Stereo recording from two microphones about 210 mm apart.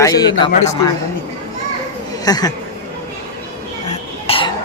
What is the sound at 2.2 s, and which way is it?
Speech, 20° left (ahead or behind).